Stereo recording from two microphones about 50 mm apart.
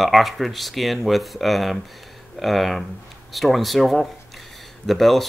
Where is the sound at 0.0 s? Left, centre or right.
Centre.